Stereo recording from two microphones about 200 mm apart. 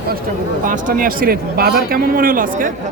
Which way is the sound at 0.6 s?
40° right (ahead or behind).